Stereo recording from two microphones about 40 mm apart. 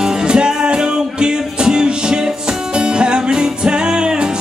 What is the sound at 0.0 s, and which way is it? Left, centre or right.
Music, right.